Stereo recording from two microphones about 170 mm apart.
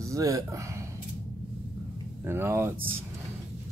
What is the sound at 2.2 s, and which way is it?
Speech, 15° right (ahead or behind).